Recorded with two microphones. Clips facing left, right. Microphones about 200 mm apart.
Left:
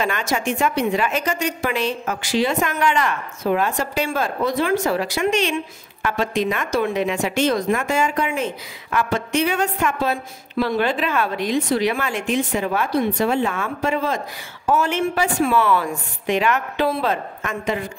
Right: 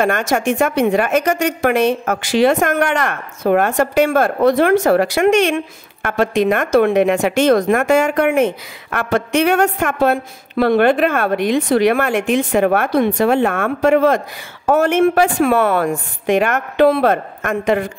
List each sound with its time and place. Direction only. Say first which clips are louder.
0.0 s speech: right 6 dB; 50° right (ahead or behind)